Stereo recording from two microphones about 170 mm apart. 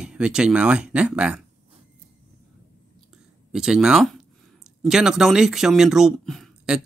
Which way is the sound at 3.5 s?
5° right (ahead or behind).